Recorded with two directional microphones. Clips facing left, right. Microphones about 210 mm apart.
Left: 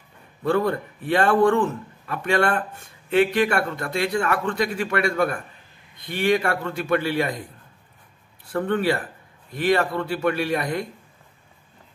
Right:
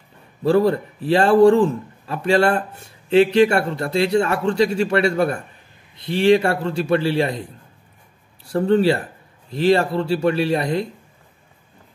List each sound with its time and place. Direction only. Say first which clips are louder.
0.4 s a man's voice: right 5 dB; 30° right (ahead or behind)
8.5 s a man's voice: right 6 dB; 25° right (ahead or behind)